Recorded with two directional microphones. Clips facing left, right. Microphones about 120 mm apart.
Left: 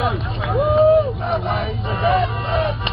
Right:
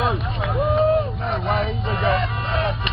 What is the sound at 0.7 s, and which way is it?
Run, 25° left (ahead or behind).